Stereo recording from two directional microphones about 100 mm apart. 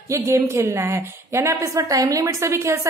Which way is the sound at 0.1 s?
30° right (ahead or behind).